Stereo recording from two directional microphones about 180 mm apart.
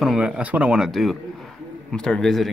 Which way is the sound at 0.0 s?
5° right (ahead or behind).